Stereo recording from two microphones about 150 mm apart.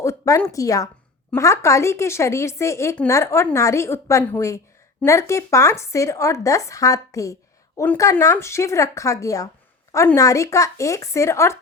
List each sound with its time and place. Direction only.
0.0 s a woman's voice: 20° left (ahead or behind)